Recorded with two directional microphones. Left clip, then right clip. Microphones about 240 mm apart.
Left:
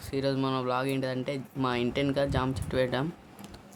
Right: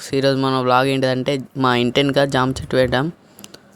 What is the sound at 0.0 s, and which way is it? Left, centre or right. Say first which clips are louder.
Speech: right 12 dB; right.